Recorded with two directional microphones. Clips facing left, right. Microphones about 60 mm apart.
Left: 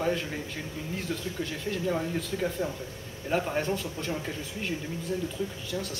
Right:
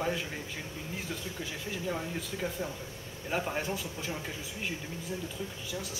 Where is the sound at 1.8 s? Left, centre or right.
Centre.